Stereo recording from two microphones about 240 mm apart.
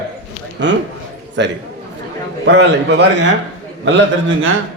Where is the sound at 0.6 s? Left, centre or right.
Right.